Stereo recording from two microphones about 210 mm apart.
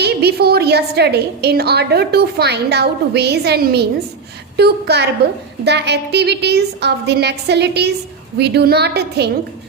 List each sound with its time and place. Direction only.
0.0 s a woman's voice: 50° right (ahead or behind)